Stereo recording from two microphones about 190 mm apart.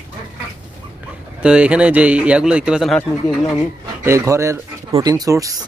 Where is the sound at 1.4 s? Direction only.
5° right (ahead or behind).